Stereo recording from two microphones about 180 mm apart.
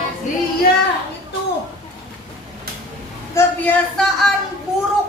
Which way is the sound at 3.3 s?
5° left (ahead or behind).